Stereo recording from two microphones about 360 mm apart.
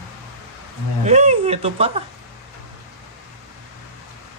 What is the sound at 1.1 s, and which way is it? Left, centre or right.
Speech, centre.